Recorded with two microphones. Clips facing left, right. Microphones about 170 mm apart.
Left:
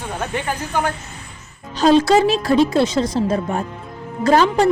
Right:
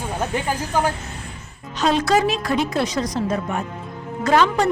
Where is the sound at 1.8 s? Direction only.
30° left (ahead or behind).